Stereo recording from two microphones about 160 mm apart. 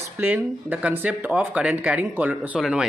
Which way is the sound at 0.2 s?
10° right (ahead or behind).